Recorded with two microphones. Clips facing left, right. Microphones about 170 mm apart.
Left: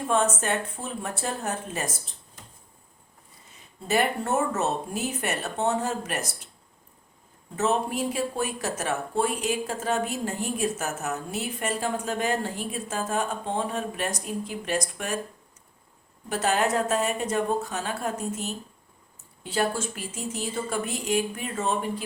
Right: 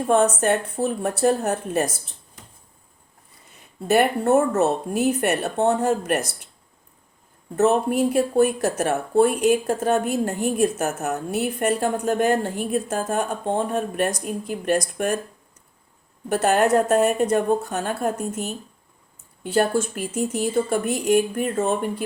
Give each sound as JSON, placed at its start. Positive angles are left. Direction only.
{"t": 0.1, "sound": "speech", "side_deg": -60}
{"t": 3.8, "sound": "speech", "side_deg": -60}
{"t": 7.5, "sound": "speech", "side_deg": -55}
{"t": 16.3, "sound": "speech", "side_deg": -55}
{"t": 19.4, "sound": "speech", "side_deg": -55}